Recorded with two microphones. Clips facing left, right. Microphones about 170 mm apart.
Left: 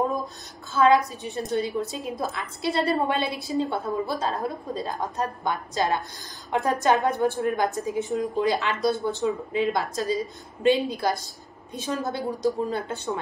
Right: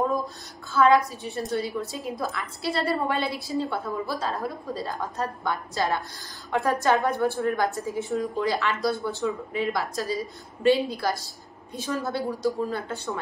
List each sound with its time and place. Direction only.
0.7 s a woman's voice: 20° left (ahead or behind)